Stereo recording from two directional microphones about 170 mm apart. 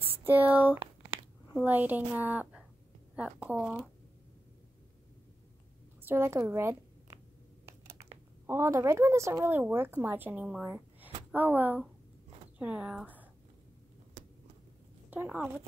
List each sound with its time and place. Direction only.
0.1 s speech: 10° right (ahead or behind)
6.0 s speech: 15° right (ahead or behind)
7.8 s a sound: 35° right (ahead or behind)
8.5 s speech: 15° right (ahead or behind)
15.0 s speech: 10° right (ahead or behind)